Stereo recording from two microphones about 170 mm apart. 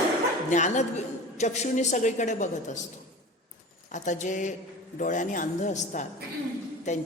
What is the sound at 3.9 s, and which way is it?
A woman's voice, 45° left (ahead or behind).